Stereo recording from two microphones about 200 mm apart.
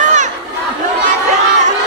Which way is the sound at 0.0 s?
35° right (ahead or behind).